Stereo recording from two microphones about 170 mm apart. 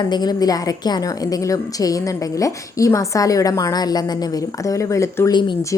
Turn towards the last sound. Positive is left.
turn(degrees=15)  # may be behind; listen again after turning